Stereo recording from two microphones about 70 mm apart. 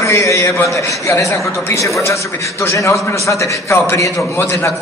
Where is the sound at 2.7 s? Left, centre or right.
Left.